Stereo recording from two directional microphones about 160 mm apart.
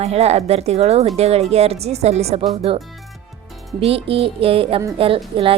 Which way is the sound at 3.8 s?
35° right (ahead or behind).